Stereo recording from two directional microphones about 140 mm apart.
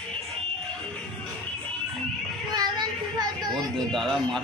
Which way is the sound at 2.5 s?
30° right (ahead or behind).